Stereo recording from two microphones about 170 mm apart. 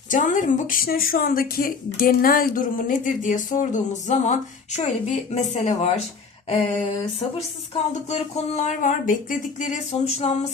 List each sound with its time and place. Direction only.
0.1 s speech: 50° left (ahead or behind)